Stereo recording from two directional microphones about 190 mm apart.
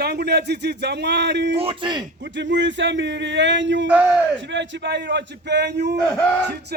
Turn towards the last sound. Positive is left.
turn(degrees=-55)  # may be behind; listen again after turning